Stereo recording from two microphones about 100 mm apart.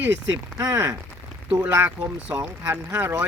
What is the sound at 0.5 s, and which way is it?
Speech, 30° right (ahead or behind).